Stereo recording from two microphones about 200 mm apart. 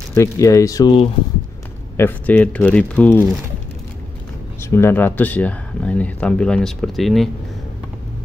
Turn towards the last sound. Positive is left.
turn(degrees=0)  # may be behind; listen again after turning